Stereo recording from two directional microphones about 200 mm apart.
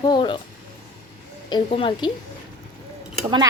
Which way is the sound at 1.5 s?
25° left (ahead or behind).